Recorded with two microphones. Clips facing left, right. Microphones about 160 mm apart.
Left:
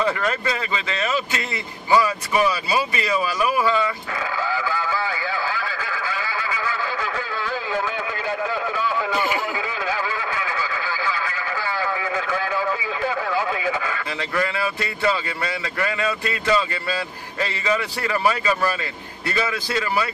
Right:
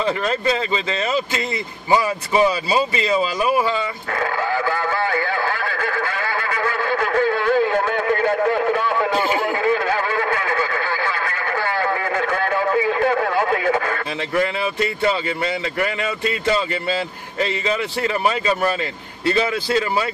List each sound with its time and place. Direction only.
0.0 s speech: 25° right (ahead or behind)
4.2 s radio: 55° right (ahead or behind)
9.1 s a sound: 25° right (ahead or behind)
9.6 s radio: 55° right (ahead or behind)
14.3 s speech: 25° right (ahead or behind)